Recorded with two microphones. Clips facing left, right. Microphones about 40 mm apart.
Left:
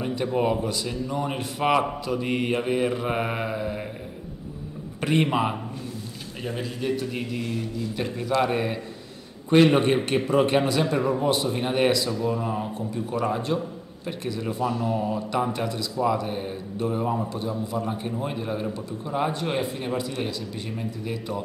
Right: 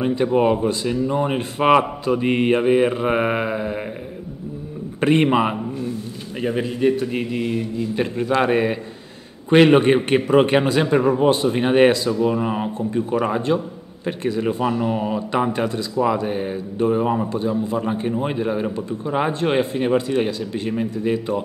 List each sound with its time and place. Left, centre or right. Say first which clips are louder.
0.0 s speech: right 7 dB; right
5.0 s speech: right 6 dB; right